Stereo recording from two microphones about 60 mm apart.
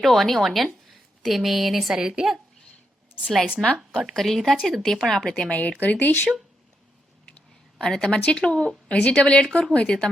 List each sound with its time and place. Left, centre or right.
0.0 s a woman's voice: centre
3.6 s speech: centre
3.9 s speech: centre
5.5 s speech: left
7.8 s speech: centre